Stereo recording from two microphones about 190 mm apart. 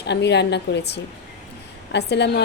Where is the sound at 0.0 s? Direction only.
65° left (ahead or behind).